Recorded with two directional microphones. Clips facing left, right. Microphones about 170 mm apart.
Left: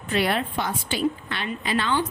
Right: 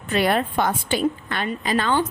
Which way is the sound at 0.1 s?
45° right (ahead or behind).